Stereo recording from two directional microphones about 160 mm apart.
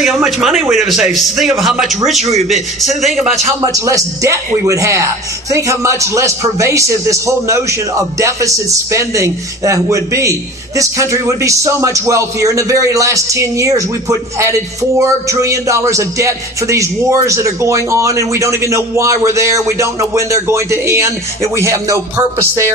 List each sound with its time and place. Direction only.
0.0 s speech: centre (ahead or behind)
3.0 s speech: centre (ahead or behind)
3.6 s speech: 20° right (ahead or behind)